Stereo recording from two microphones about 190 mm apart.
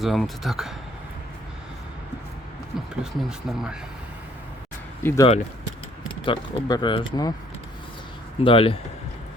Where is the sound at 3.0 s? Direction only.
Centre (ahead or behind).